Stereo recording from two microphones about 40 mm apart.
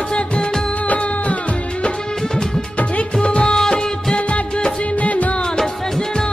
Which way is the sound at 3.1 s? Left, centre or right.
Left.